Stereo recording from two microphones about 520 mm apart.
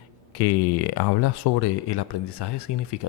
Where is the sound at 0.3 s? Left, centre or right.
Left.